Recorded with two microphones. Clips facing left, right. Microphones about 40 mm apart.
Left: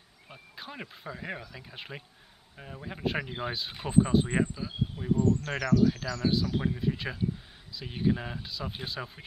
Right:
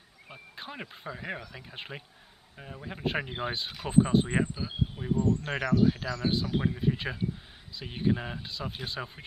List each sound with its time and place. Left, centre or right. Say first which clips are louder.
0.3 s speech: right 1 dB; centre